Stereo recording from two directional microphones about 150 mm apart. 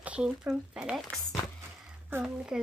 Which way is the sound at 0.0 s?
10° right (ahead or behind).